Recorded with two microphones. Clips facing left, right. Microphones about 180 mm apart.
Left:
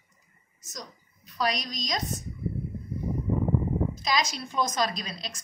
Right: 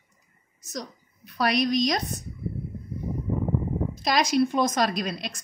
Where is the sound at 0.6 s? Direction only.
65° right (ahead or behind).